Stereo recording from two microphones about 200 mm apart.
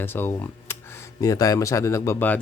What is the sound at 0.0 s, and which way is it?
Speech, 10° left (ahead or behind).